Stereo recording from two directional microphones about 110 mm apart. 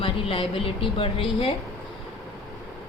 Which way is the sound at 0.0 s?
55° left (ahead or behind).